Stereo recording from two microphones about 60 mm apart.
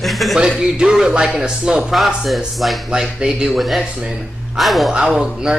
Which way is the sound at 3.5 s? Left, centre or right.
Centre.